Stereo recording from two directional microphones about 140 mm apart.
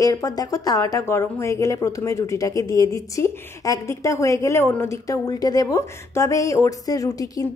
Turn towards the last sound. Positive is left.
turn(degrees=25)  # may be behind; listen again after turning